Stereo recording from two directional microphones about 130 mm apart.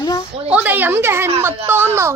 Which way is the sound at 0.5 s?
10° right (ahead or behind).